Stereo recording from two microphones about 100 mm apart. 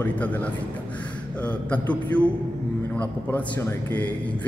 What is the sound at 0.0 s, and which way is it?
A man's voice, 15° left (ahead or behind).